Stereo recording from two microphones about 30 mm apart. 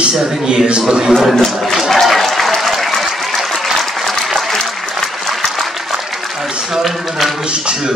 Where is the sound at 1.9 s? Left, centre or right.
Centre.